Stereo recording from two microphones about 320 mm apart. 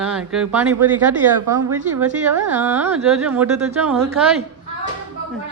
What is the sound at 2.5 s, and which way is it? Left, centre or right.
Speech, centre.